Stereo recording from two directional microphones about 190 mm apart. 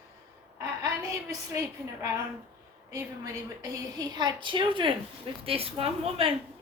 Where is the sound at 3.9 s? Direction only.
20° right (ahead or behind).